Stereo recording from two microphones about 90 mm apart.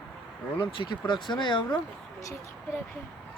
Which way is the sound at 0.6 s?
65° left (ahead or behind).